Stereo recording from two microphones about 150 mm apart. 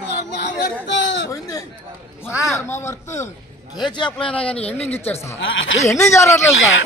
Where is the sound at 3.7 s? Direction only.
30° left (ahead or behind).